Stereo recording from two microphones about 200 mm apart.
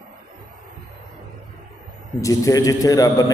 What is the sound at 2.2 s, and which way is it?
A man's voice, 15° left (ahead or behind).